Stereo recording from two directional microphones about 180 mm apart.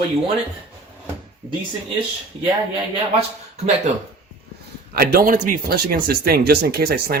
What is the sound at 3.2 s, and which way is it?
Speech, 35° right (ahead or behind).